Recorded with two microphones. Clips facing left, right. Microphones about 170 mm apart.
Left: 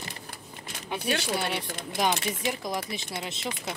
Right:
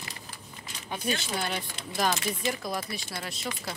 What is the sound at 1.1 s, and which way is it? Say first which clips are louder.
Speech: left 2 dB; 5° left (ahead or behind).